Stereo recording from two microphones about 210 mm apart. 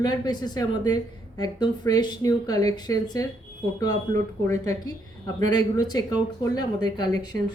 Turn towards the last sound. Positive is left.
turn(degrees=20)  # may be behind; listen again after turning